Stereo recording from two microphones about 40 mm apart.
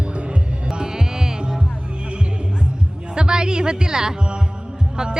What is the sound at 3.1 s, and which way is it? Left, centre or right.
Speech, right.